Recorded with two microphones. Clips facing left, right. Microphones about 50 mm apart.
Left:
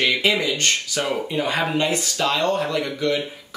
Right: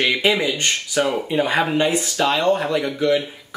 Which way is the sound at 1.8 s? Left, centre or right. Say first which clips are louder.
Right 3 dB; centre.